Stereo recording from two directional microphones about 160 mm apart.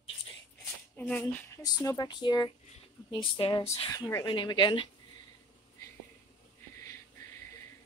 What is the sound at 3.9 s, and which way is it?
Speech, 25° left (ahead or behind).